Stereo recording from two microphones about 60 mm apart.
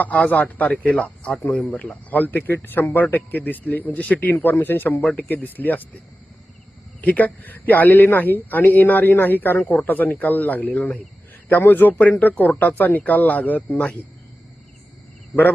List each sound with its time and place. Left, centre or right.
0.0 s speech: left
7.0 s speech: left
11.4 s speech: left